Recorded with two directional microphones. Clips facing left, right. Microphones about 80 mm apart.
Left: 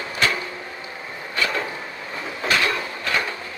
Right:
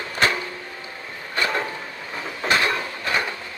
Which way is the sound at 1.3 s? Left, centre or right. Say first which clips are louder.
Right 1 dB; right.